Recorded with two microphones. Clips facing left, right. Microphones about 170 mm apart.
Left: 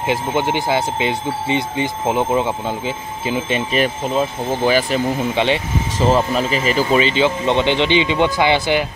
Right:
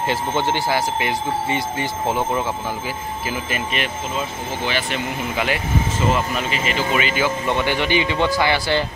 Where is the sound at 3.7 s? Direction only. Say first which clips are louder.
Left 7 dB; 40° left (ahead or behind); by 8.9 s 15° left (ahead or behind).